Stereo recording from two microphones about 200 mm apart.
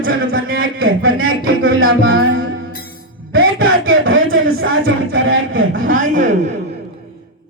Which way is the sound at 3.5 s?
85° right.